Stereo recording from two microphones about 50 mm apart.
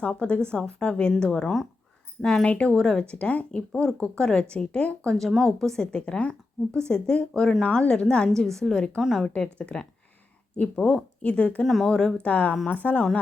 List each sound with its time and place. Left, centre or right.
0.0 s speech: left
2.7 s speech: centre
3.8 s speech: centre
5.0 s speech: centre
8.4 s speech: centre
9.4 s speech: centre
11.6 s speech: centre
11.9 s speech: centre
12.2 s a woman's voice: left